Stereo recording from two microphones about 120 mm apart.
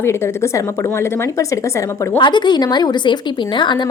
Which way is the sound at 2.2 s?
40° left (ahead or behind).